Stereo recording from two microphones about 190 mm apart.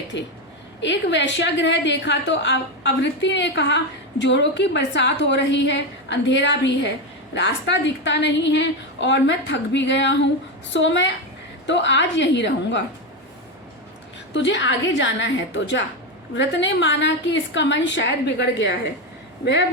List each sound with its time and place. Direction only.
0.1 s a woman's voice: 70° left (ahead or behind)
14.3 s a woman's voice: 70° left (ahead or behind)